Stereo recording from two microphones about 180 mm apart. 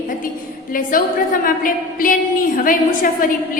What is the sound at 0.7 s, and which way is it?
A woman's voice, 50° left (ahead or behind).